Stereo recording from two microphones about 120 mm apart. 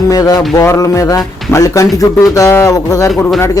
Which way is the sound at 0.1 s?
30° left (ahead or behind).